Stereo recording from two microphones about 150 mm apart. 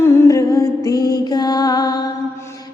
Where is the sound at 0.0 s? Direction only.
20° left (ahead or behind).